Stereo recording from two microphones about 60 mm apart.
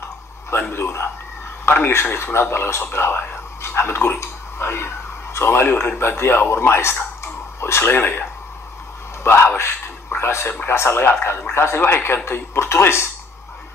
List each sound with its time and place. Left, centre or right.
0.5 s a man's voice: left
2.1 s speech: left
9.2 s a sound: left
10.7 s speech: left